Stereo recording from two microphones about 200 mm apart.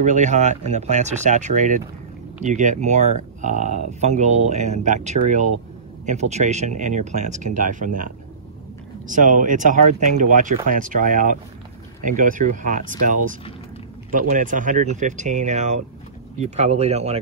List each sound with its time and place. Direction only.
0.0 s speech: 35° right (ahead or behind)